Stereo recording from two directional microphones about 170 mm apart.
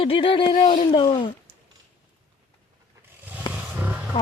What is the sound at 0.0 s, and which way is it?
Speech, 30° left (ahead or behind).